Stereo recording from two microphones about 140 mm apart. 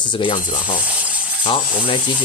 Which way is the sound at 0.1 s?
35° left (ahead or behind).